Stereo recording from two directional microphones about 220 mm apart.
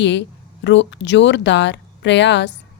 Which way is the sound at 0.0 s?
55° left (ahead or behind).